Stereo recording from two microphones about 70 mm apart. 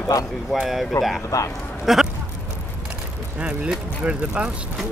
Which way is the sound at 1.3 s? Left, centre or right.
Left.